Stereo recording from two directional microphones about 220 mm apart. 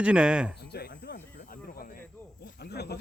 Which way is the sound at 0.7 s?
50° left (ahead or behind).